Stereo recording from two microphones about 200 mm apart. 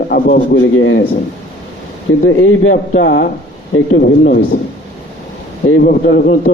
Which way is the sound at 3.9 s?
45° left (ahead or behind).